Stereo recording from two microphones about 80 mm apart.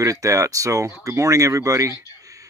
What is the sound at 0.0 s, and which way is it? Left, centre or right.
Speech, right.